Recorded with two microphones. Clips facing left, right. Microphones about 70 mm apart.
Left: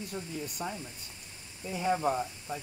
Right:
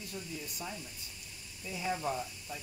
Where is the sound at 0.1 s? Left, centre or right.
Left.